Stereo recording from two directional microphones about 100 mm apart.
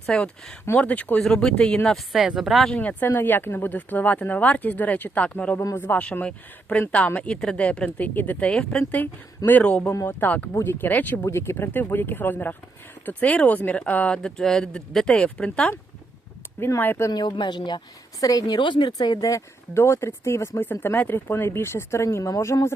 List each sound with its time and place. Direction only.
0.0 s speech: 10° left (ahead or behind)
2.1 s speech: 5° right (ahead or behind)
2.7 s speech: 15° left (ahead or behind)
9.9 s speech: 25° left (ahead or behind); by 15.7 s 10° left (ahead or behind)
16.6 s speech: 25° left (ahead or behind)
17.1 s speech: 45° left (ahead or behind)
19.7 s speech: 25° left (ahead or behind)